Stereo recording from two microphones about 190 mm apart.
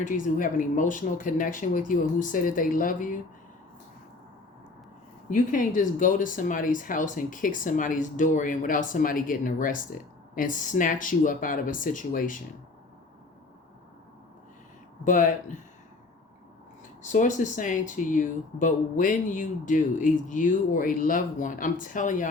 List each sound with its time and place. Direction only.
0.0 s speech: 45° left (ahead or behind)
5.3 s speech: 45° left (ahead or behind)
15.0 s speech: 40° left (ahead or behind)
17.0 s speech: 40° left (ahead or behind)